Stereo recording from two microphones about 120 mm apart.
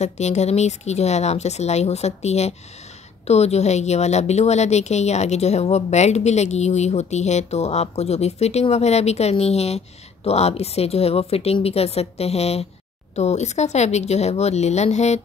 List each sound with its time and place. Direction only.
0.0 s a woman's voice: 70° left (ahead or behind)